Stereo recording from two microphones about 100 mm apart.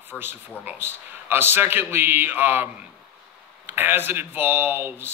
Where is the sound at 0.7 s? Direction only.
20° right (ahead or behind).